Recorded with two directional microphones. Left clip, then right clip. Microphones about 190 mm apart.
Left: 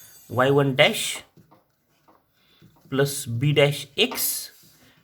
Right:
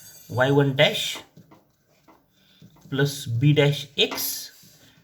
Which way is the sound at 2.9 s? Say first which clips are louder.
Left 2 dB; 45° left (ahead or behind).